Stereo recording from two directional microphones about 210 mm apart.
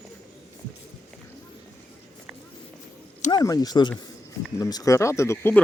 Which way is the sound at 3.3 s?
15° left (ahead or behind).